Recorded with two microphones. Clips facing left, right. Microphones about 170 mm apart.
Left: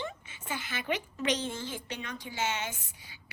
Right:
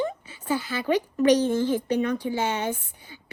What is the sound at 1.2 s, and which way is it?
Speech, 45° right (ahead or behind).